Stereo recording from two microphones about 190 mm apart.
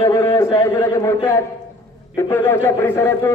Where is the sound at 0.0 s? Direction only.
15° left (ahead or behind).